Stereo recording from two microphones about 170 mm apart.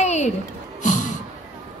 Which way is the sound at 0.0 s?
40° left (ahead or behind).